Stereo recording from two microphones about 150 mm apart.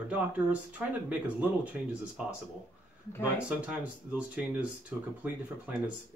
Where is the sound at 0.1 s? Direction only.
10° right (ahead or behind).